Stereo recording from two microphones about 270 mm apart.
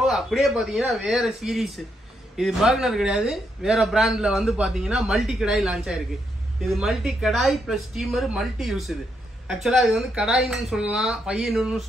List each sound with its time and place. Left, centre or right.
0.0 s speech: centre